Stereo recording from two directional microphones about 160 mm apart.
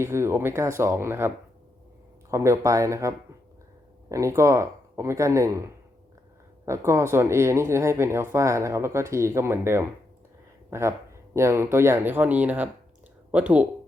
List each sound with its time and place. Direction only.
0.0 s speech: 15° right (ahead or behind)
2.3 s speech: 20° right (ahead or behind)